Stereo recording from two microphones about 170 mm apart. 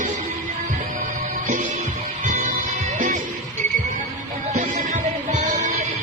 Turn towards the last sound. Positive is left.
turn(degrees=-45)  # may be behind; listen again after turning